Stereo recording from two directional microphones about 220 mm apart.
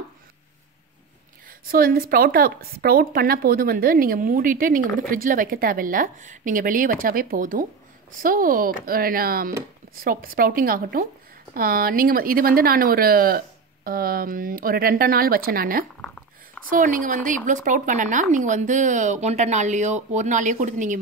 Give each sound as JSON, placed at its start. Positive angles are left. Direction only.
{"t": 1.7, "sound": "a woman's voice", "side_deg": -40}